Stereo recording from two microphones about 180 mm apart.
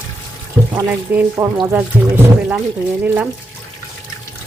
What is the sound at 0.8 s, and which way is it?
Speech, 10° right (ahead or behind).